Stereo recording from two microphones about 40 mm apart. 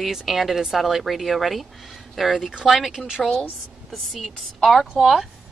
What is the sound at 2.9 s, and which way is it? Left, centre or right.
Speech, centre.